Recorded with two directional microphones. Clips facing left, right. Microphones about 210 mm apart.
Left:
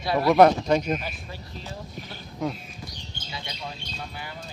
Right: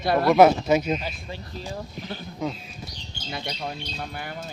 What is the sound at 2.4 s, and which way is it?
Speech, centre (ahead or behind).